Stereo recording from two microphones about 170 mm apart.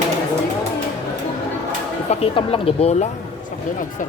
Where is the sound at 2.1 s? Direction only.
35° left (ahead or behind).